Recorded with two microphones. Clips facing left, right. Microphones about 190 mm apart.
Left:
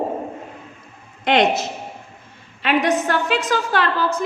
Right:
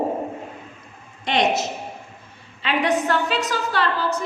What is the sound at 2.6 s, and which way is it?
A woman's voice, 45° left (ahead or behind).